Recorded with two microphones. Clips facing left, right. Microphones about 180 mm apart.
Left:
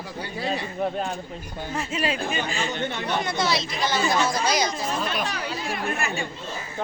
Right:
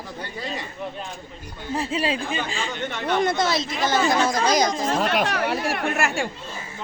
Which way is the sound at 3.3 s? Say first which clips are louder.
Right 3 dB; 50° right (ahead or behind).